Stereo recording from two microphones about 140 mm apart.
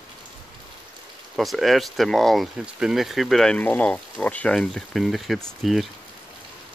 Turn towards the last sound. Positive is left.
turn(degrees=0)  # may be behind; listen again after turning